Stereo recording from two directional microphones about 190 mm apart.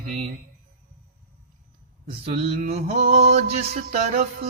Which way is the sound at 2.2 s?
35° right (ahead or behind).